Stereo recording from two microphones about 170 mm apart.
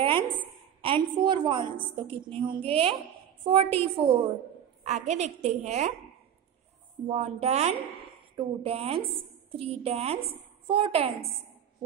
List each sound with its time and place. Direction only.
0.0 s a sound: 30° right (ahead or behind)
1.1 s a woman's voice: 25° right (ahead or behind)
4.8 s a woman's voice: 40° right (ahead or behind)
7.1 s a woman's voice: 35° right (ahead or behind)